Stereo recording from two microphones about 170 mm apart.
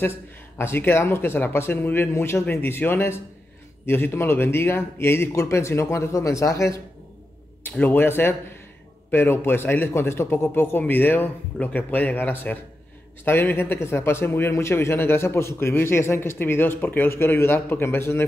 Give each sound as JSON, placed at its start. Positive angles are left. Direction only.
{"t": 0.6, "sound": "speech", "side_deg": 15}